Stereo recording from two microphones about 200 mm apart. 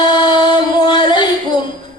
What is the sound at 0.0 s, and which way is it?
Music, 25° left (ahead or behind).